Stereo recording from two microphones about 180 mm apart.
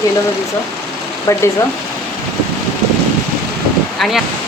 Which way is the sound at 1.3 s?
20° left (ahead or behind).